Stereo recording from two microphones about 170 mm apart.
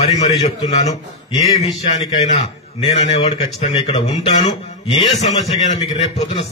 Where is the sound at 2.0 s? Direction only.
35° left (ahead or behind).